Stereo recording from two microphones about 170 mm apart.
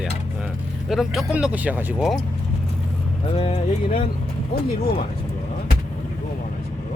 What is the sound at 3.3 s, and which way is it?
Speech, 35° left (ahead or behind).